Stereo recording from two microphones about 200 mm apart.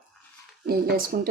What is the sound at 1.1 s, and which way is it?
Speech, 45° right (ahead or behind).